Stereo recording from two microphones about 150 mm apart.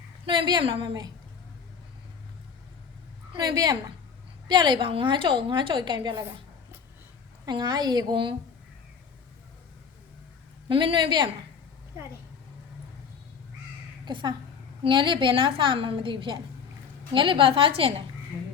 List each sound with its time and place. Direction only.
0.3 s a woman's voice: 30° right (ahead or behind)
3.3 s a woman's voice: 25° right (ahead or behind)
7.4 s a woman's voice: 30° right (ahead or behind)
10.7 s a woman's voice: 35° right (ahead or behind)
14.0 s a woman's voice: 30° right (ahead or behind)